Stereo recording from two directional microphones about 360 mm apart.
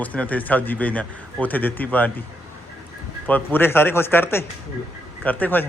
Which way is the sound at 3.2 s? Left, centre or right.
Centre.